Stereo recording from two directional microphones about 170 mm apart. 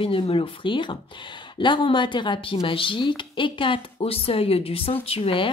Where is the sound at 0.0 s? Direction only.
30° left (ahead or behind).